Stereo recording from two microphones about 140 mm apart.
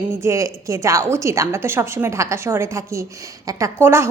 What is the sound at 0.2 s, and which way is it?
A woman's voice, 20° right (ahead or behind).